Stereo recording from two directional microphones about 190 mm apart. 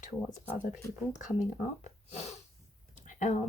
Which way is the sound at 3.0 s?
40° left (ahead or behind).